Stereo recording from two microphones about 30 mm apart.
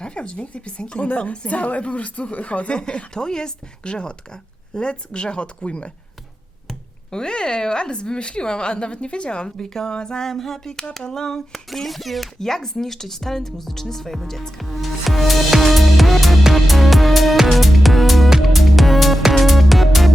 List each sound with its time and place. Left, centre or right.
0.0 s a woman's voice: left
1.0 s speech: left
2.8 s a woman's voice: left
7.1 s a woman's voice: left
9.6 s speech: centre
10.2 s speech: centre
11.7 s music: centre
12.4 s speech: centre
14.7 s music: centre